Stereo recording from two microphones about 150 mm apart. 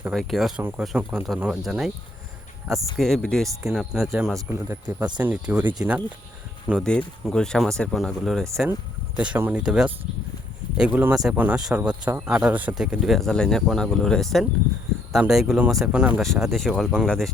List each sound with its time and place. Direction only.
0.1 s speech: centre (ahead or behind)
4.4 s speech: 15° right (ahead or behind)
7.3 s speech: 5° left (ahead or behind)
9.1 s speech: 10° right (ahead or behind)